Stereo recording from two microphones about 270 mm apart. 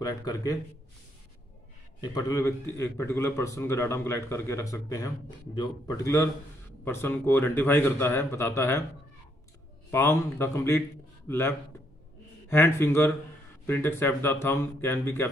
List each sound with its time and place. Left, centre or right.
0.0 s a man's voice: centre
2.0 s a man's voice: centre
9.8 s a man's voice: centre